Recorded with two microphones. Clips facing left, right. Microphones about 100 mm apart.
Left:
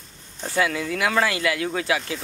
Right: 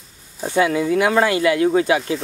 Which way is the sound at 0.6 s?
25° right (ahead or behind).